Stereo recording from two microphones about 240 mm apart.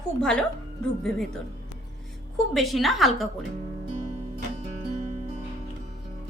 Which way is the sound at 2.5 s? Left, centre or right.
Centre.